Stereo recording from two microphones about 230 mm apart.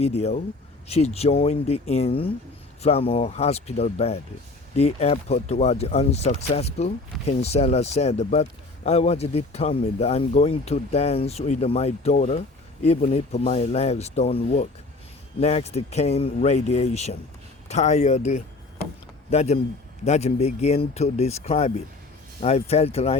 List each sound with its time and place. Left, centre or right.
0.0 s speech: left